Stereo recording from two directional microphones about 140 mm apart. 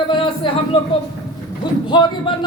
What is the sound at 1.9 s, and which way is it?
Speech, 35° left (ahead or behind).